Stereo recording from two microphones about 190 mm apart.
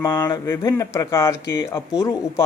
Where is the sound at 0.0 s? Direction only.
20° left (ahead or behind).